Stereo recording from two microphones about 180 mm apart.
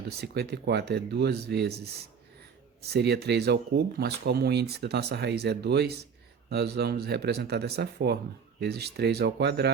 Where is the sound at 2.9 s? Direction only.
65° right (ahead or behind).